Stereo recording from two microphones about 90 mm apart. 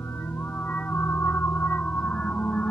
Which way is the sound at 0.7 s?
25° left (ahead or behind).